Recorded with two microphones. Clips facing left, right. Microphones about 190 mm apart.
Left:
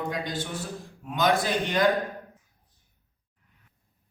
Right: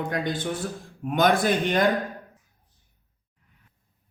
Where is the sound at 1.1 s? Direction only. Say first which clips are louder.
Right 4 dB; 55° right (ahead or behind).